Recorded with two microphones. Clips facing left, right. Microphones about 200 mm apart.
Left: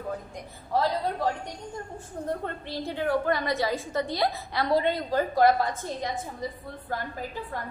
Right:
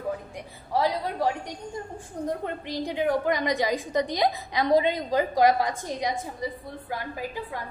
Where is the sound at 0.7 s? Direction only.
10° right (ahead or behind).